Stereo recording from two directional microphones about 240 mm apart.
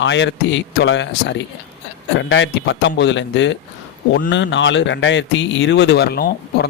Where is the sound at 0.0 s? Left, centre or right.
Left.